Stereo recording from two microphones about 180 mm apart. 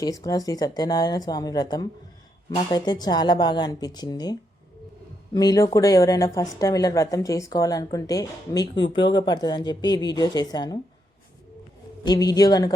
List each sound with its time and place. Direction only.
0.3 s speech: 20° left (ahead or behind)
12.0 s speech: 20° left (ahead or behind)